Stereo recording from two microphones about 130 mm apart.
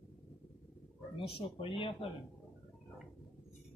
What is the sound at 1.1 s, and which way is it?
Speech, 45° left (ahead or behind).